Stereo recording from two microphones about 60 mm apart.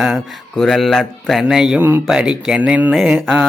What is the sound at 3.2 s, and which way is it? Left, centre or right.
Speech, centre.